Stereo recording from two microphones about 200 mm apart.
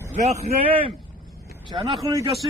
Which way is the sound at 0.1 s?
35° right (ahead or behind).